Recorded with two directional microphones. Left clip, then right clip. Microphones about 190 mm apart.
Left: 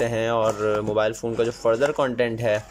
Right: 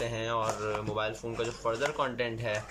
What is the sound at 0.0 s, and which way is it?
Speech, 40° left (ahead or behind).